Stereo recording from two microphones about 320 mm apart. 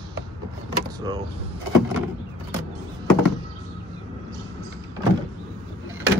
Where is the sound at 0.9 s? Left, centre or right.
Centre.